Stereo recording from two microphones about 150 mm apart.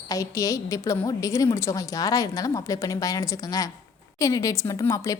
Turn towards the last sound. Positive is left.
turn(degrees=20)  # may be behind; listen again after turning